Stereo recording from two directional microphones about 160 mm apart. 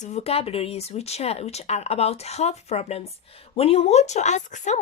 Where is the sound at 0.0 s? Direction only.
45° left (ahead or behind).